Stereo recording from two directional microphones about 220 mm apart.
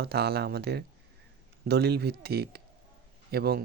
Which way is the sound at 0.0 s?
45° right (ahead or behind).